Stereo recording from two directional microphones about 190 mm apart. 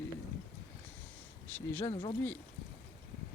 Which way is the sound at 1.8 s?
30° left (ahead or behind).